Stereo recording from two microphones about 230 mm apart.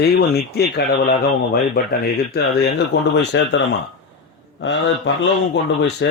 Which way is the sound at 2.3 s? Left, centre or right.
Left.